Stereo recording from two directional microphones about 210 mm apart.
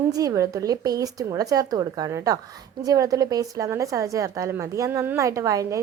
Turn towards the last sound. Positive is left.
turn(degrees=-15)  # may be behind; listen again after turning